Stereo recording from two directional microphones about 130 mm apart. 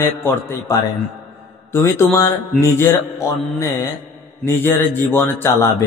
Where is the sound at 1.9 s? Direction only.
20° left (ahead or behind).